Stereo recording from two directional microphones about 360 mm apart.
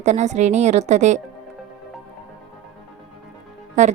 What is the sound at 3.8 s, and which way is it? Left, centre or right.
Speech, centre.